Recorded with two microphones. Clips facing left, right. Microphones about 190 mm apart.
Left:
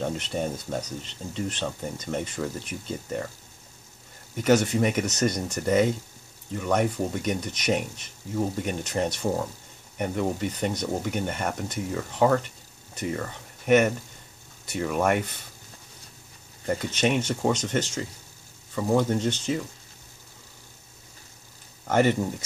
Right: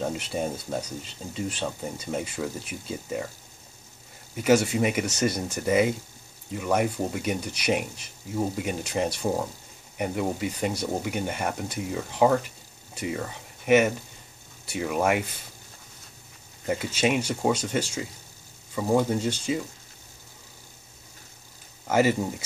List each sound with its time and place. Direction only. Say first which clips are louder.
0.0 s speech: even; 10° right (ahead or behind)
4.4 s speech: even; 10° right (ahead or behind)
16.6 s speech: even; 10° right (ahead or behind)
21.8 s speech: even; 5° right (ahead or behind)